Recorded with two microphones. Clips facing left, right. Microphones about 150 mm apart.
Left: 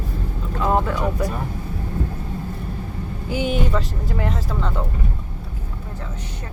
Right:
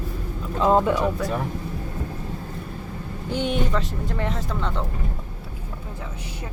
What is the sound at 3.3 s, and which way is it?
Speech, 5° left (ahead or behind).